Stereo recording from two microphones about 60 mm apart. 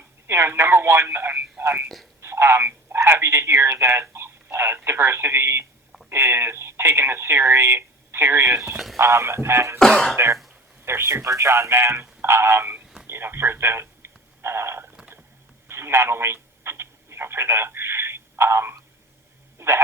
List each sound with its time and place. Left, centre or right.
0.3 s speech: right
2.2 s telephone: right
4.9 s speech: right
9.7 s speech: centre
10.8 s speech: right
13.1 s telephone: right
19.5 s a sound: right